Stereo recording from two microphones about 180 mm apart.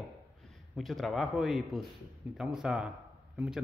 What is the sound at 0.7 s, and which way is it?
Speech, centre (ahead or behind).